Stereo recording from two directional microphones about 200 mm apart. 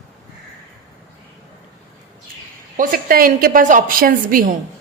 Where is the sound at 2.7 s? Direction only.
45° right (ahead or behind).